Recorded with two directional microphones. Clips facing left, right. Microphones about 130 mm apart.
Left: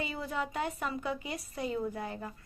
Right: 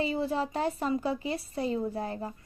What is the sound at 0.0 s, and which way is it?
Speech, 30° right (ahead or behind).